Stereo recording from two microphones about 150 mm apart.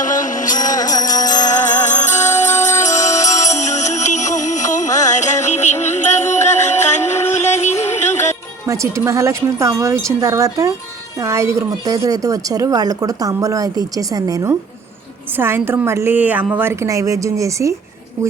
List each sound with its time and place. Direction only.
0.0 s music: 60° left (ahead or behind)
0.6 s music: 25° left (ahead or behind)
1.4 s music: 55° left (ahead or behind)
8.6 s a woman's voice: 20° right (ahead or behind)